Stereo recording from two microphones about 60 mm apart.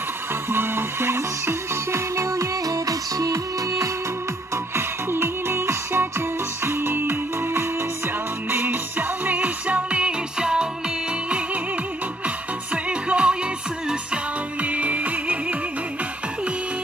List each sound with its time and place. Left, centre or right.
0.3 s music: right
4.7 s music: right